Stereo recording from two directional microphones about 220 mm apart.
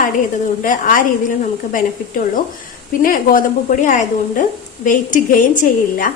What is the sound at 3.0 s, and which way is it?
A woman's voice, 40° left (ahead or behind).